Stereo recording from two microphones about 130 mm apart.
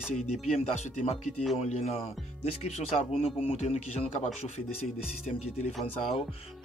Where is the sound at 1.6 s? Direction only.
55° left (ahead or behind).